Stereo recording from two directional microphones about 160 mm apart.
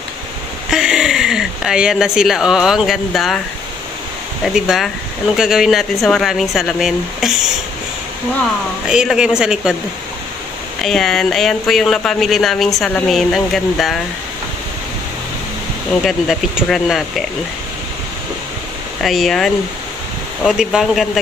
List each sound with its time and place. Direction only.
0.7 s speech: 5° right (ahead or behind)
4.6 s speech: centre (ahead or behind)
8.8 s speech: 5° right (ahead or behind)
10.8 s speech: 5° left (ahead or behind)
16.0 s speech: centre (ahead or behind)
19.0 s speech: centre (ahead or behind)